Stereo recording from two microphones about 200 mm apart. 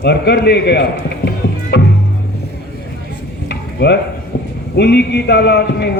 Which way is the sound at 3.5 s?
55° left (ahead or behind).